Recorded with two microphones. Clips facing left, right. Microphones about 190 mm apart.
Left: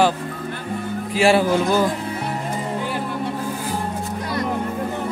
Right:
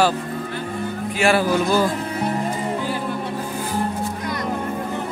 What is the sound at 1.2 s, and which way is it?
Speech, 25° left (ahead or behind).